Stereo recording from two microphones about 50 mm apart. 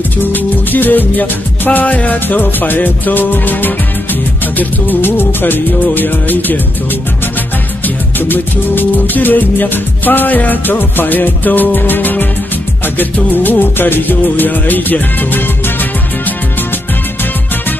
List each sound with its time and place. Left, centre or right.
0.2 s music: left
7.8 s music: left